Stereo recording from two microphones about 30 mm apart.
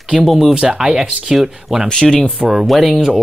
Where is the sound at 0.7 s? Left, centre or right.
Right.